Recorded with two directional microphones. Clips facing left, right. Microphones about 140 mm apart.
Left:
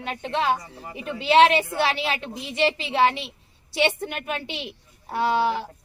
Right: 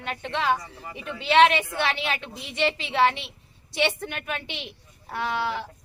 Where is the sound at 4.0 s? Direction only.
30° left (ahead or behind).